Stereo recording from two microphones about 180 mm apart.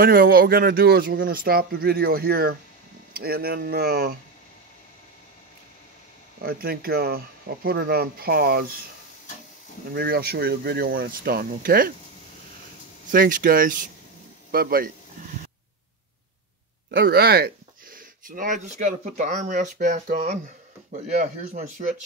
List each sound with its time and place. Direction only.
0.0 s a man's voice: 55° right (ahead or behind)
6.4 s a man's voice: 60° right (ahead or behind)
9.9 s a man's voice: 60° right (ahead or behind)
13.1 s a man's voice: 50° right (ahead or behind)
16.9 s speech: 60° right (ahead or behind); by 21.8 s 45° right (ahead or behind)